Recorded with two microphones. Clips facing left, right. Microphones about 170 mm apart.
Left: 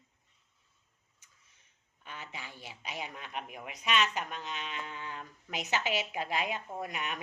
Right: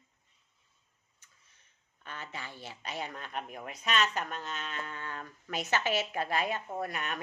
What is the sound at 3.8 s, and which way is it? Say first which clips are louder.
Speech: even; 40° right (ahead or behind).